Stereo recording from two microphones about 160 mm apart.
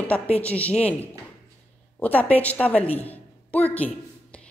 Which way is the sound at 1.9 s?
10° left (ahead or behind).